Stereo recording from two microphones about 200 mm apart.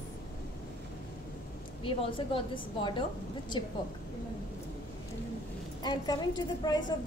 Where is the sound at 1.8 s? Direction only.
25° left (ahead or behind).